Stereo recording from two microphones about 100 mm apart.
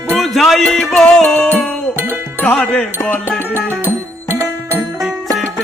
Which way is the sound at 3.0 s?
25° left (ahead or behind).